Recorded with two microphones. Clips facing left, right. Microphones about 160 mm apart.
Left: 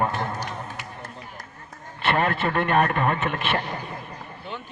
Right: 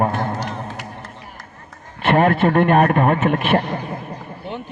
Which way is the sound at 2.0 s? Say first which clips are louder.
Right 8 dB; 50° right (ahead or behind).